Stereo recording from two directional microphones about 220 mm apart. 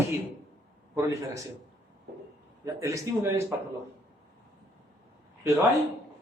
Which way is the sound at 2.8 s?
15° right (ahead or behind).